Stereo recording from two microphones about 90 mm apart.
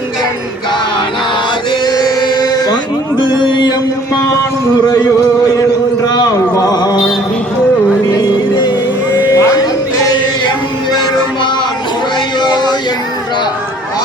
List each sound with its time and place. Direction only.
1.8 s chant: 50° left (ahead or behind)
3.2 s music: 60° left (ahead or behind)
6.5 s mantra: 45° left (ahead or behind)
8.2 s music: 55° left (ahead or behind)
9.1 s music: 40° left (ahead or behind); by 12.7 s 55° left (ahead or behind)